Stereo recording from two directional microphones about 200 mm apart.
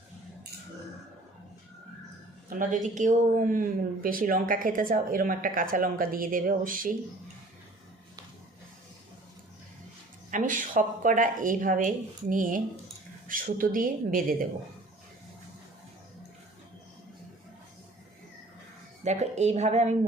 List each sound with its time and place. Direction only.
2.5 s speech: 40° right (ahead or behind)
10.3 s speech: 40° right (ahead or behind)
19.0 s speech: 35° right (ahead or behind)